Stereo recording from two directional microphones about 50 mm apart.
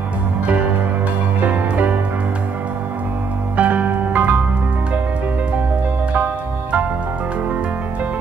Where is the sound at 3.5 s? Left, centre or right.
Right.